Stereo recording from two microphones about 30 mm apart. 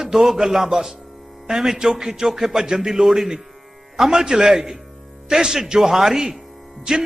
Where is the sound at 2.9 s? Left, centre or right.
Centre.